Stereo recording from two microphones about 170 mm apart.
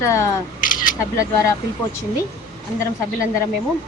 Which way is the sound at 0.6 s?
55° left (ahead or behind).